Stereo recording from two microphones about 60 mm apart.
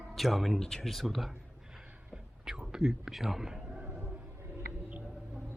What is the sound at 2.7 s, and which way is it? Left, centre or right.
A man's voice, centre.